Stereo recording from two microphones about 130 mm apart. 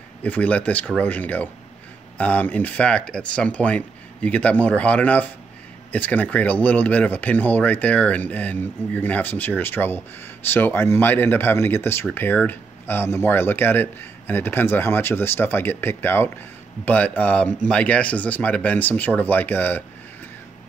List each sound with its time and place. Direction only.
0.2 s speech: 10° left (ahead or behind)